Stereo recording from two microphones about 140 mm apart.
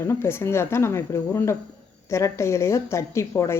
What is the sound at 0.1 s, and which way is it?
A woman's voice, 20° left (ahead or behind).